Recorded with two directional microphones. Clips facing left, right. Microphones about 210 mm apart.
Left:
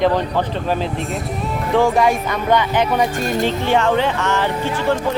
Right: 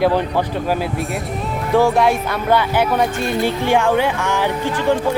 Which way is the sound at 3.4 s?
10° right (ahead or behind).